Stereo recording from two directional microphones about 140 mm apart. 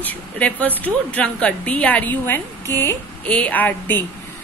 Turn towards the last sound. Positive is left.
turn(degrees=15)  # may be behind; listen again after turning